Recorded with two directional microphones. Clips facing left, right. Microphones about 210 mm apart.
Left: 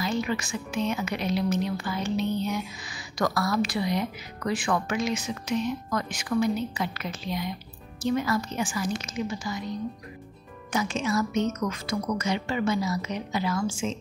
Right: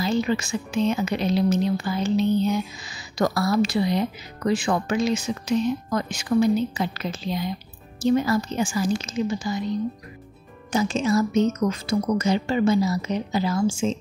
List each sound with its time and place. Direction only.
0.0 s a woman's voice: 30° right (ahead or behind)
10.7 s a woman's voice: 30° right (ahead or behind)